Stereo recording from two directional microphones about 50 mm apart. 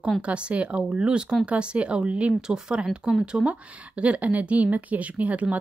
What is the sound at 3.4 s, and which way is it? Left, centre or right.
Speech, right.